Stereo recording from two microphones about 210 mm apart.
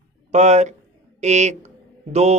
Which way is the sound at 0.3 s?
35° right (ahead or behind).